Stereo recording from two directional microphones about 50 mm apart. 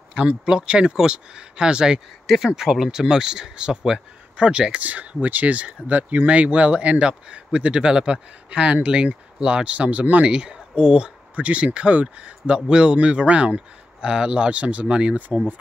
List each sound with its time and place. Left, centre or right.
0.5 s speech: centre
4.8 s speech: right
15.1 s speech: right